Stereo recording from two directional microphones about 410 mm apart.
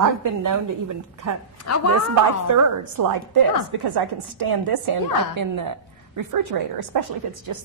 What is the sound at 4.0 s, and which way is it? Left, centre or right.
A woman's voice, right.